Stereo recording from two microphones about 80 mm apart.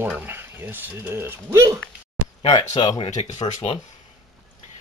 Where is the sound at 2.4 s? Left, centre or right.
Left.